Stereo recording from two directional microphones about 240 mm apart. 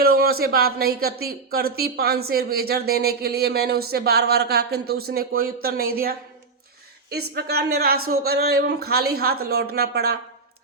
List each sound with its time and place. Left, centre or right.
0.0 s speech: right
7.3 s speech: right